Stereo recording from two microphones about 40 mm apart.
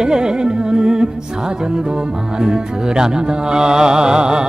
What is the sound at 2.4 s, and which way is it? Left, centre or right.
Music, centre.